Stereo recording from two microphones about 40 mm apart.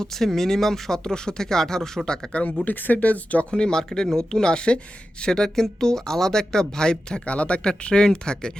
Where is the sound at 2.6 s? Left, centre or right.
Left.